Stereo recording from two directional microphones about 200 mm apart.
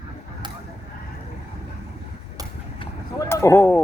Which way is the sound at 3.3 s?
15° left (ahead or behind).